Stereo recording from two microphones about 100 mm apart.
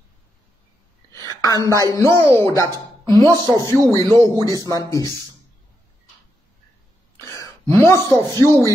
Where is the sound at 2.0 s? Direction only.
25° left (ahead or behind).